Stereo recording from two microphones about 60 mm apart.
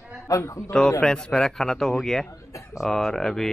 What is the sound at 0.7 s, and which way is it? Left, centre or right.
Speech, centre.